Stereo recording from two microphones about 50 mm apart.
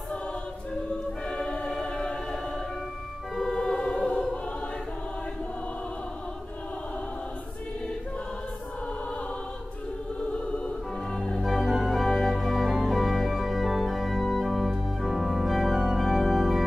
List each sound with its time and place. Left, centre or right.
1.2 s choir: centre
3.3 s music: centre
11.1 s music: centre
11.4 s music: centre